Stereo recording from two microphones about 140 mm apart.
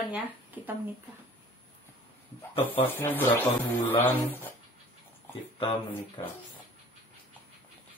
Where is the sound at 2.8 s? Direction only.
15° left (ahead or behind).